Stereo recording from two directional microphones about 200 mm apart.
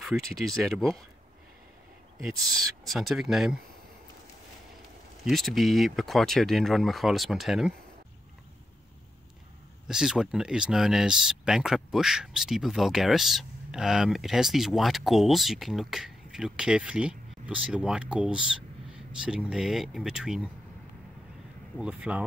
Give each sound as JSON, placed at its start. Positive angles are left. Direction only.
{"t": 0.0, "sound": "speech", "side_deg": 0}
{"t": 2.8, "sound": "speech", "side_deg": 0}
{"t": 5.3, "sound": "speech", "side_deg": 0}
{"t": 9.8, "sound": "speech", "side_deg": -5}
{"t": 21.7, "sound": "speech", "side_deg": -5}